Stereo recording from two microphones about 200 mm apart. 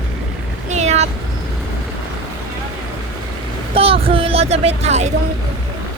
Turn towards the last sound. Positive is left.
turn(degrees=-35)  # may be behind; listen again after turning